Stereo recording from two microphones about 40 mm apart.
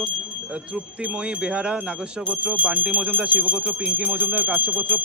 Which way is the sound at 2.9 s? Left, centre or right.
Right.